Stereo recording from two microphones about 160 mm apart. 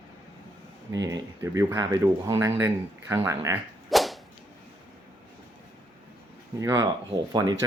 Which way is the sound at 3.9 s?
Centre (ahead or behind).